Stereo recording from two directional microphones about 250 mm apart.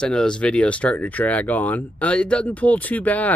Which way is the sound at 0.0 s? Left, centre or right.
Centre.